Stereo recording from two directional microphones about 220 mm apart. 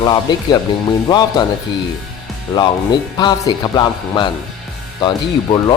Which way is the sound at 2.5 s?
20° left (ahead or behind).